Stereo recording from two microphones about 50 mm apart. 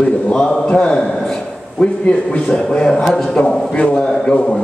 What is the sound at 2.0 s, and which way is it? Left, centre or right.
A man's voice, left.